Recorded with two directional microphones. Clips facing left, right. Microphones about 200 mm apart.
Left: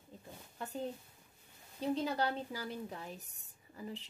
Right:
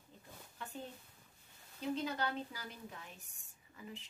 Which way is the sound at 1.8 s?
35° left (ahead or behind).